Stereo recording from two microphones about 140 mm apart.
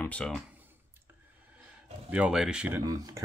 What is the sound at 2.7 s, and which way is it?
Speech, 25° right (ahead or behind).